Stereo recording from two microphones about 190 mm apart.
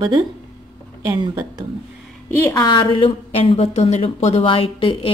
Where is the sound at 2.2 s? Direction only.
15° left (ahead or behind).